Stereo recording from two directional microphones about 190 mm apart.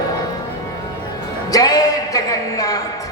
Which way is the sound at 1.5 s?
20° left (ahead or behind).